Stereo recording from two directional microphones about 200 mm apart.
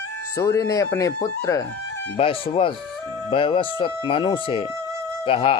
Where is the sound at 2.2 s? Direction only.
25° left (ahead or behind).